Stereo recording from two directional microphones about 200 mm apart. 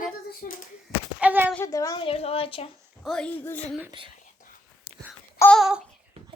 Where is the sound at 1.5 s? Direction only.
15° left (ahead or behind).